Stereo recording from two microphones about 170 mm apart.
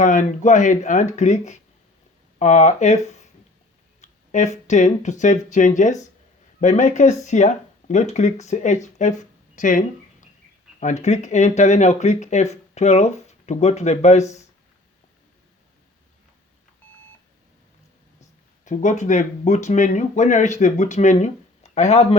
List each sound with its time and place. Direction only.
0.0 s speech: 50° left (ahead or behind)
18.6 s speech: 45° left (ahead or behind)